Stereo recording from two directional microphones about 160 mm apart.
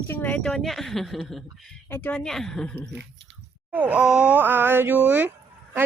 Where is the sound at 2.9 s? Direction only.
90° right.